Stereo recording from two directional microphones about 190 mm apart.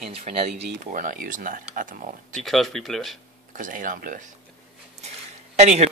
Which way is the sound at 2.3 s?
Centre (ahead or behind).